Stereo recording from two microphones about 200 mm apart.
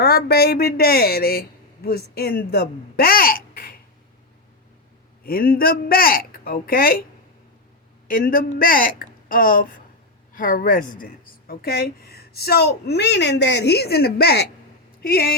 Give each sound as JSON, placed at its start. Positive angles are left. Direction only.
{"t": 0.0, "sound": "a woman's voice", "side_deg": 50}
{"t": 5.2, "sound": "a woman's voice", "side_deg": 45}
{"t": 8.0, "sound": "a woman's voice", "side_deg": 45}